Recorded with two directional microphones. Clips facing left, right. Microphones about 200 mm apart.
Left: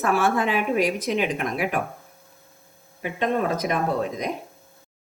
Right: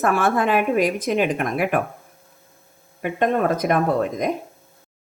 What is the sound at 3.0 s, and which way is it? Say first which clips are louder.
Speech: right 4 dB; 55° right (ahead or behind).